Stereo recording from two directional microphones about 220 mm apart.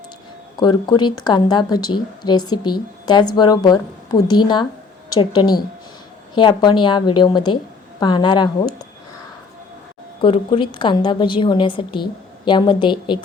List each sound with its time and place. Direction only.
0.5 s speech: 20° left (ahead or behind)
10.2 s speech: 25° left (ahead or behind)